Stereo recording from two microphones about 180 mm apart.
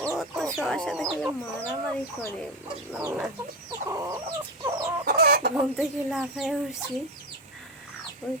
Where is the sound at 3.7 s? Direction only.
15° right (ahead or behind).